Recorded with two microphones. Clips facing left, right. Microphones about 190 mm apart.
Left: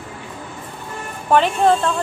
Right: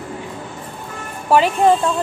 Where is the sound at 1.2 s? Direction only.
5° right (ahead or behind).